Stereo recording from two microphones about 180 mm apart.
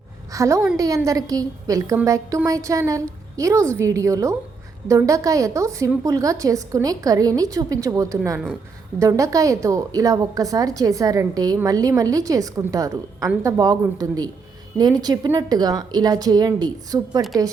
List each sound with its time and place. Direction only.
0.3 s a woman's voice: 15° right (ahead or behind)